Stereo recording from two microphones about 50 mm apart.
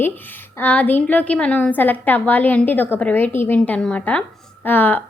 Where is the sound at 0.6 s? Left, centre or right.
Left.